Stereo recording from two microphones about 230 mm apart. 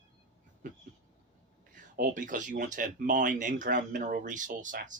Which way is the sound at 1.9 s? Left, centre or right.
Right.